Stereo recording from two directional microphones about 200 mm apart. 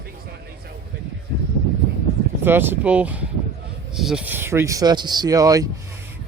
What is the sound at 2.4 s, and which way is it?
Speech, 10° right (ahead or behind).